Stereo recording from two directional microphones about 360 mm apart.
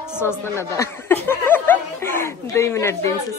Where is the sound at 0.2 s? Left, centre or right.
Centre.